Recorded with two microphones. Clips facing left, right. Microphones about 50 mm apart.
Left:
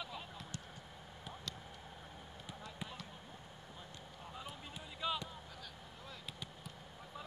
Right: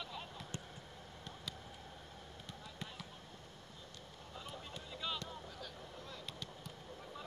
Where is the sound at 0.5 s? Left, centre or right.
Right.